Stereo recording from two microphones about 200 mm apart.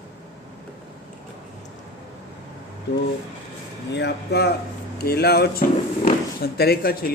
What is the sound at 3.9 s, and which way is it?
Speech, 55° left (ahead or behind).